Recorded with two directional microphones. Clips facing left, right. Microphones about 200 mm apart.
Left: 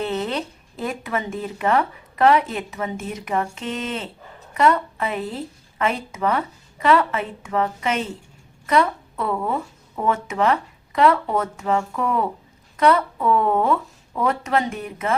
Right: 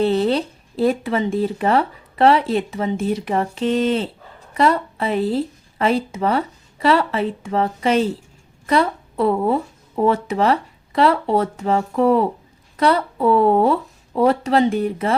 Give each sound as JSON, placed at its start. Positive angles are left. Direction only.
{"t": 0.0, "sound": "speech", "side_deg": -30}